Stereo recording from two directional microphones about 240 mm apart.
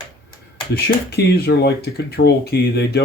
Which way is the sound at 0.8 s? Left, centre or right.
Left.